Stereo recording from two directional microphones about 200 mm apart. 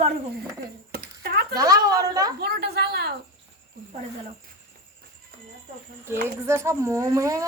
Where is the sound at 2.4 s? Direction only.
55° right (ahead or behind).